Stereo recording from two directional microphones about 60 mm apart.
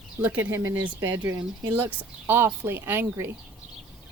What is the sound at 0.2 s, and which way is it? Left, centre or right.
Speech, right.